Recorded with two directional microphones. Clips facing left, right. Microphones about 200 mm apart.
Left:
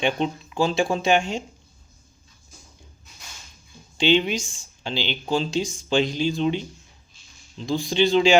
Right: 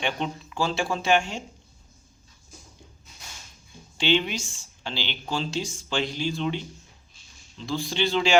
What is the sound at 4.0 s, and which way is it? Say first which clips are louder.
Speech: left 4 dB; 15° left (ahead or behind).